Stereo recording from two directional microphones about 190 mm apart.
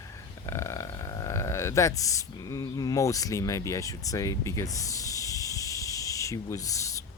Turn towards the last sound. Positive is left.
turn(degrees=15)  # may be behind; listen again after turning